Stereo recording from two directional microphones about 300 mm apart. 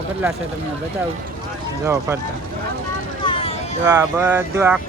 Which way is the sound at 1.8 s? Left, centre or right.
Centre.